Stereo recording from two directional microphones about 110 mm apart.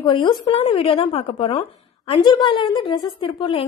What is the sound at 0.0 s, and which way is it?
Speech, 40° left (ahead or behind).